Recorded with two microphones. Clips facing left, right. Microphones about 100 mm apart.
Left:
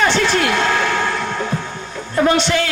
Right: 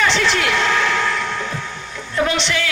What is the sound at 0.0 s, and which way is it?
Vehicle, 45° left (ahead or behind).